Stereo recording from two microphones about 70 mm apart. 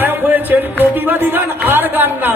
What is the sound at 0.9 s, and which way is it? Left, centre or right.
Speech, right.